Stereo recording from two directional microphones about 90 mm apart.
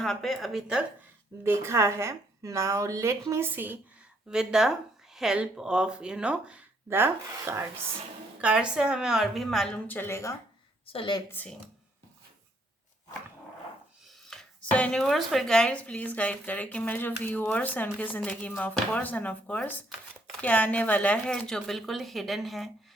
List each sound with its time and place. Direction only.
0.0 s speech: 5° left (ahead or behind)
1.5 s a woman's voice: 30° right (ahead or behind)
4.3 s a woman's voice: 5° right (ahead or behind)
6.9 s speech: 25° right (ahead or behind)
8.4 s a woman's voice: 10° right (ahead or behind)
9.8 s a woman's voice: 20° left (ahead or behind)
10.9 s a woman's voice: 60° left (ahead or behind)
14.1 s chopping: 5° left (ahead or behind)
14.6 s speech: 10° left (ahead or behind)
15.0 s speech: centre (ahead or behind)